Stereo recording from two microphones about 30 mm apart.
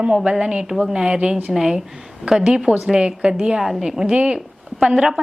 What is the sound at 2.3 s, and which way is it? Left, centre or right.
A woman's voice, right.